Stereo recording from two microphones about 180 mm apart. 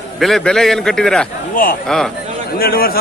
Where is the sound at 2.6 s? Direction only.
55° left (ahead or behind).